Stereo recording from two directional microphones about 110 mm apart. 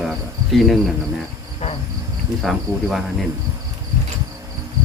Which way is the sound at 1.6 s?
70° left (ahead or behind).